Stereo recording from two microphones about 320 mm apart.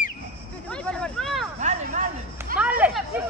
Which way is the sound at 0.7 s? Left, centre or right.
Centre.